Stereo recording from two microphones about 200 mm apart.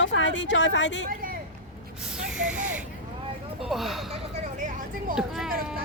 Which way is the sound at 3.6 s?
Centre (ahead or behind).